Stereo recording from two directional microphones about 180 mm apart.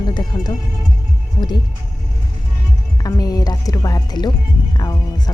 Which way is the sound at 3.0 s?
20° left (ahead or behind).